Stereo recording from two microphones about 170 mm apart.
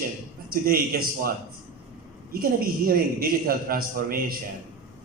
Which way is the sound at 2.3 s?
60° right (ahead or behind).